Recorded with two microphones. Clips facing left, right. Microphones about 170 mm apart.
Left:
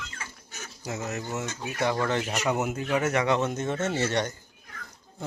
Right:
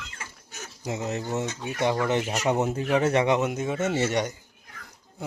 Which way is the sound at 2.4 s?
30° right (ahead or behind).